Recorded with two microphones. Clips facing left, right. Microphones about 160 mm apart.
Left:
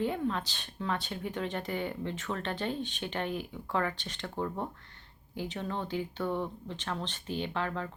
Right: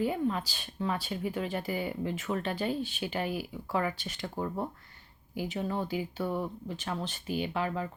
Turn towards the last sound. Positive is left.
turn(degrees=-10)  # may be behind; listen again after turning